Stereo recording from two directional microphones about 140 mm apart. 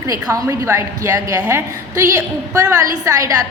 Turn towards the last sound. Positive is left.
turn(degrees=-25)  # may be behind; listen again after turning